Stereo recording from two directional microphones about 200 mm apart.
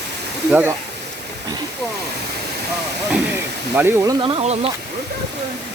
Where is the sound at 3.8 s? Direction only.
10° right (ahead or behind).